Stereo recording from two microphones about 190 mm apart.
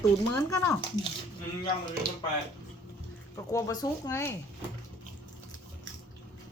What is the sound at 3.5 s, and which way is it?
Speech, 20° left (ahead or behind).